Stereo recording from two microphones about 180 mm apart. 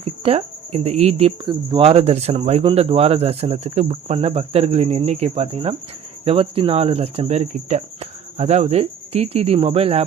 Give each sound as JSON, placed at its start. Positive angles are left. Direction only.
{"t": 0.0, "sound": "speech", "side_deg": -35}